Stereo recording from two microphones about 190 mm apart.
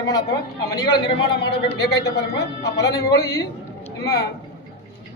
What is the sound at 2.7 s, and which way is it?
A man's voice, 20° left (ahead or behind).